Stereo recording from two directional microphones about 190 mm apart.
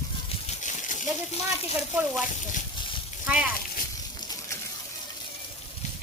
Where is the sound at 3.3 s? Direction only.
5° right (ahead or behind).